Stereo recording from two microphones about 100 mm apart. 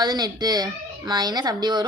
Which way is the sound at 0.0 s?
45° right (ahead or behind).